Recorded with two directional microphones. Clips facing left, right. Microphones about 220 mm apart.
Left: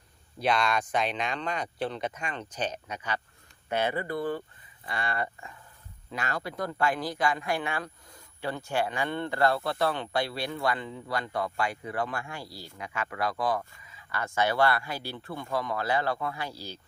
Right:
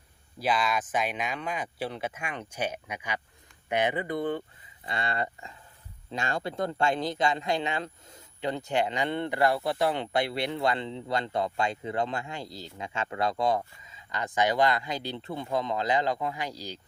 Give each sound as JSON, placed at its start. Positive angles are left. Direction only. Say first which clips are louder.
{"t": 0.3, "sound": "speech", "louder": "left 1 dB", "side_deg": -5}